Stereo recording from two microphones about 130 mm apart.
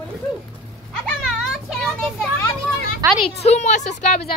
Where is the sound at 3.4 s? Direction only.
60° left (ahead or behind).